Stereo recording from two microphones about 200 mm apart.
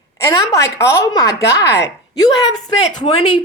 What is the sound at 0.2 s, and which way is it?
A woman's voice, 15° left (ahead or behind).